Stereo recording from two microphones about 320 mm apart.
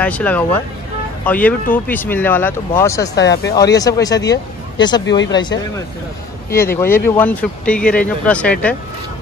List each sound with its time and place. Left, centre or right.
0.0 s speech: centre
3.2 s speech: left
3.5 s speech: centre
6.5 s speech: centre